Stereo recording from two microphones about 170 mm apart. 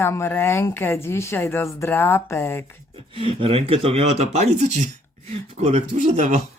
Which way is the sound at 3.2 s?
35° right (ahead or behind).